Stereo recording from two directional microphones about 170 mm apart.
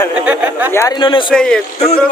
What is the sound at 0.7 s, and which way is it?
Speech, 15° left (ahead or behind).